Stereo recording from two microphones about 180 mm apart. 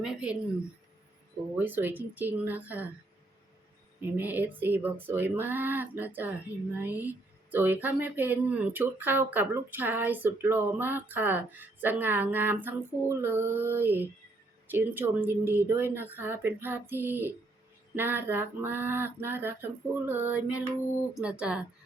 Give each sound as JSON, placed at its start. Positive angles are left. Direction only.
{"t": 0.0, "sound": "speech", "side_deg": -5}
{"t": 1.5, "sound": "speech", "side_deg": -10}
{"t": 4.2, "sound": "speech", "side_deg": -10}